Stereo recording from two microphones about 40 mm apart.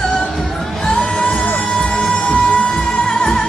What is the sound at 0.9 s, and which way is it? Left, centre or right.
Music, left.